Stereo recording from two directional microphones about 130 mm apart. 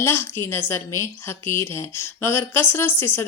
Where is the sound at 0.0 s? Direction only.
20° left (ahead or behind).